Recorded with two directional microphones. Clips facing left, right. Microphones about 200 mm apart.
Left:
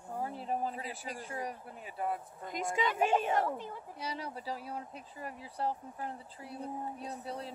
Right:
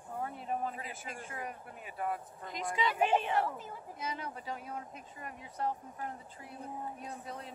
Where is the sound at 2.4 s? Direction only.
50° left (ahead or behind).